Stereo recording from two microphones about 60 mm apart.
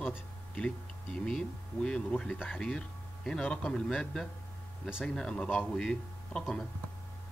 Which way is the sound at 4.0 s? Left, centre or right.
Centre.